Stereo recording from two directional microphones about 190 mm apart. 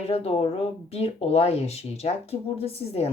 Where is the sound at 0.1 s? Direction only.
30° left (ahead or behind).